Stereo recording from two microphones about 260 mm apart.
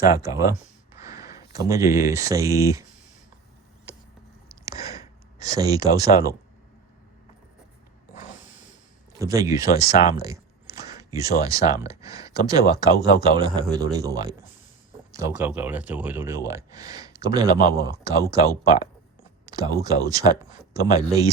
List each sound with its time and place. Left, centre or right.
0.1 s speech: centre
4.4 s a sound: centre
5.5 s speech: centre
8.1 s snort: left
9.1 s speech: centre
9.8 s speech: left
10.2 s a sound: centre
12.5 s speech: centre